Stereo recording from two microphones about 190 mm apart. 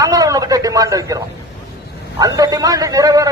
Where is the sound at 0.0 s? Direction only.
20° right (ahead or behind).